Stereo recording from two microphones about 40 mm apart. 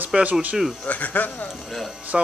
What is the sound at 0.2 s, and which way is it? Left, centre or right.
Speech, right.